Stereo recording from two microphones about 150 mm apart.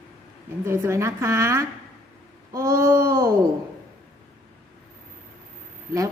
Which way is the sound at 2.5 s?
25° right (ahead or behind).